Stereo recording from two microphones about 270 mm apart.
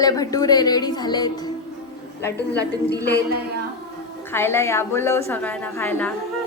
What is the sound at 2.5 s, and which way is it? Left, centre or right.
Speech, left.